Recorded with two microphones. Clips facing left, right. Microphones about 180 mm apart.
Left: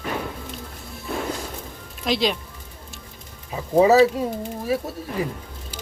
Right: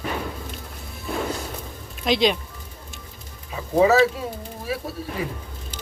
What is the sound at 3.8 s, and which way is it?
Speech, 35° left (ahead or behind).